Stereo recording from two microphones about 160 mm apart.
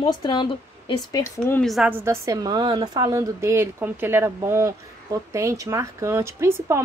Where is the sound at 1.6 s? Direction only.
Centre (ahead or behind).